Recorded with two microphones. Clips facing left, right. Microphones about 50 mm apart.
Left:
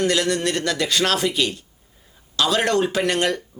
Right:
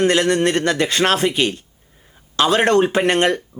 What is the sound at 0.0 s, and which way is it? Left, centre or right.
Speech, right.